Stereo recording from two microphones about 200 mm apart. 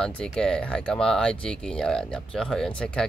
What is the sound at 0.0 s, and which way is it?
Speech, 5° left (ahead or behind).